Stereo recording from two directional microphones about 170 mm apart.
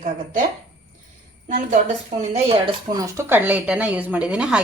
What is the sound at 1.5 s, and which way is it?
Speech, 45° right (ahead or behind).